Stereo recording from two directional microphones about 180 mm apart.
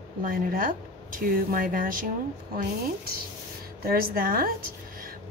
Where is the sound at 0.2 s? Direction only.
50° right (ahead or behind).